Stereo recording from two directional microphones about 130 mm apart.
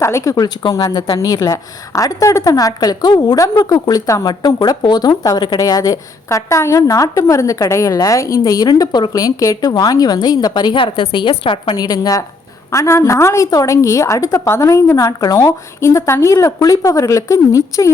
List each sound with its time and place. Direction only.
0.0 s a woman's voice: 25° left (ahead or behind)